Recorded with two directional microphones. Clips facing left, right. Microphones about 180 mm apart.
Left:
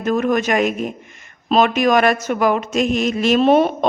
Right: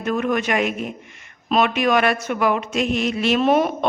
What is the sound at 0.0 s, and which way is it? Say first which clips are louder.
Speech: left 4 dB; 40° left (ahead or behind).